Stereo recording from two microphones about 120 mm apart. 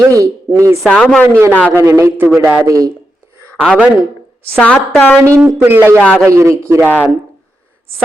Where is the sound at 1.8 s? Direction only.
25° right (ahead or behind).